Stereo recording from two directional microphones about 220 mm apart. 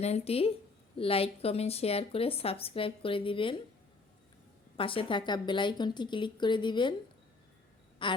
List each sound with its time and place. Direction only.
0.0 s a woman's voice: 30° left (ahead or behind)
4.8 s a woman's voice: 25° left (ahead or behind)
8.0 s speech: 20° left (ahead or behind)